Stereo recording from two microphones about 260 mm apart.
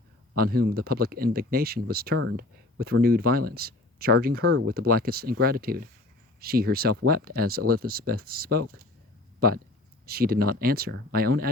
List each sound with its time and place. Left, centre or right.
0.3 s speech: right
4.4 s speech: right
4.7 s speech: right